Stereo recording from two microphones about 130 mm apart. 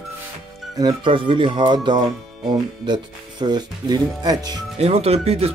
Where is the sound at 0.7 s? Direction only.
35° right (ahead or behind).